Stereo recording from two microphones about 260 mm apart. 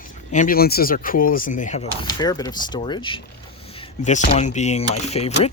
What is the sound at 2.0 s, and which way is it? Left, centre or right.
Speech, centre.